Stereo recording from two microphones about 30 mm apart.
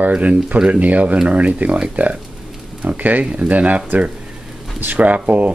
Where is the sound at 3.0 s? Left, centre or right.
Right.